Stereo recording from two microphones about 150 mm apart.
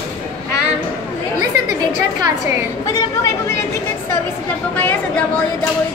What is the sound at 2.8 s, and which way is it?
Speech, 20° left (ahead or behind).